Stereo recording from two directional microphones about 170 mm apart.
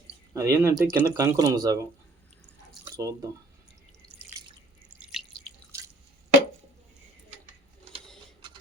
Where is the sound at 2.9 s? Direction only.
20° right (ahead or behind).